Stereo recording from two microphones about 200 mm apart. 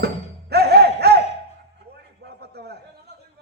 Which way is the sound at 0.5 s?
55° right (ahead or behind).